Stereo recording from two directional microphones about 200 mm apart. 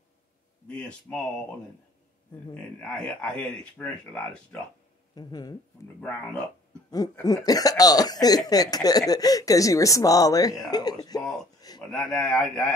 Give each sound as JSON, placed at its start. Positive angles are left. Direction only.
{"t": 0.7, "sound": "speech", "side_deg": 5}
{"t": 2.5, "sound": "speech", "side_deg": 5}
{"t": 5.1, "sound": "speech", "side_deg": 20}
{"t": 5.9, "sound": "speech", "side_deg": 5}
{"t": 7.2, "sound": "speech", "side_deg": 20}
{"t": 11.9, "sound": "speech", "side_deg": 5}